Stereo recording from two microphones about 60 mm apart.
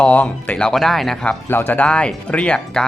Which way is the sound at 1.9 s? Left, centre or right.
Centre.